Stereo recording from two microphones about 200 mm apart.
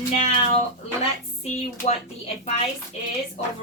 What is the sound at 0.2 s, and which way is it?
Speech, 35° left (ahead or behind).